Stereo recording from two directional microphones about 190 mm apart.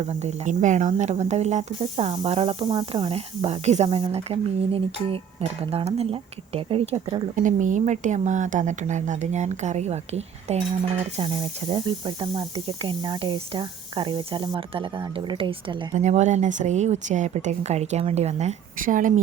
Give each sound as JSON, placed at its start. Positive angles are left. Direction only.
{"t": 0.0, "sound": "speech", "side_deg": -35}
{"t": 7.3, "sound": "speech", "side_deg": -40}
{"t": 16.0, "sound": "speech", "side_deg": -40}